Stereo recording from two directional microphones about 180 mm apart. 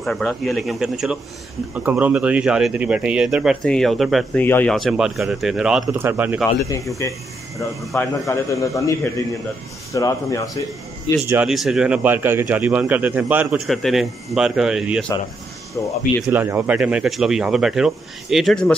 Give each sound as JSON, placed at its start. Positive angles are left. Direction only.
{"t": 0.0, "sound": "a man's voice", "side_deg": 0}
{"t": 7.0, "sound": "a man's voice", "side_deg": 15}
{"t": 9.9, "sound": "speech", "side_deg": 20}
{"t": 11.2, "sound": "a man's voice", "side_deg": -5}
{"t": 15.8, "sound": "a man's voice", "side_deg": 10}
{"t": 16.3, "sound": "speech", "side_deg": -10}